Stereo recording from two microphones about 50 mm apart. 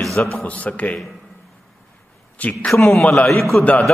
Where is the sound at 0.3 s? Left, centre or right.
Left.